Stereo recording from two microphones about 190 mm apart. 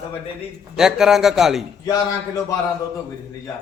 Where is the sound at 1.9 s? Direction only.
20° left (ahead or behind).